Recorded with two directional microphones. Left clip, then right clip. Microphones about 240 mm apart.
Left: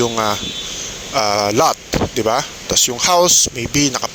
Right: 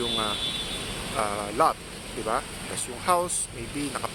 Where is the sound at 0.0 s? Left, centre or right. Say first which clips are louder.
Left 9 dB; left.